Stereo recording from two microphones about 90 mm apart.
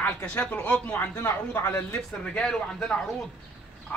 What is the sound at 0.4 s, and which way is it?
Speech, 15° left (ahead or behind).